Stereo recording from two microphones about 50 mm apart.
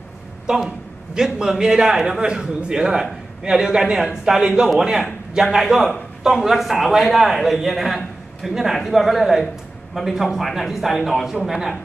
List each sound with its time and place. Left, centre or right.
0.7 s a man's voice: centre